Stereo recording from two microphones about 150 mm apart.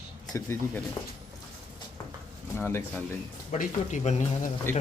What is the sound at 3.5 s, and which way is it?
Speech, 55° left (ahead or behind).